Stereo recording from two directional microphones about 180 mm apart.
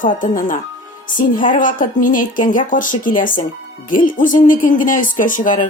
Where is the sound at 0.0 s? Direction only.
50° left (ahead or behind).